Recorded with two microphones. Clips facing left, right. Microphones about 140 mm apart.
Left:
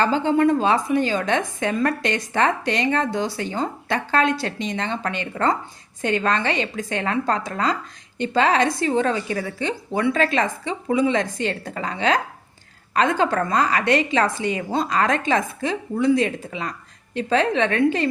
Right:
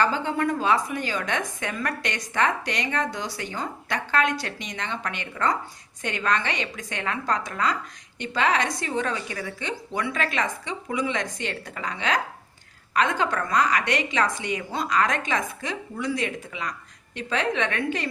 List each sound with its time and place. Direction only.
0.0 s a woman's voice: 30° left (ahead or behind)